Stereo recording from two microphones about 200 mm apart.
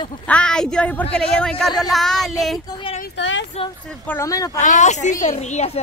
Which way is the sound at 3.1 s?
65° left (ahead or behind).